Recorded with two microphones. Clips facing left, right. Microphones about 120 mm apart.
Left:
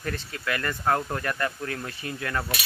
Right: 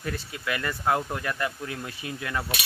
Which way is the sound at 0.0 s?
10° right (ahead or behind).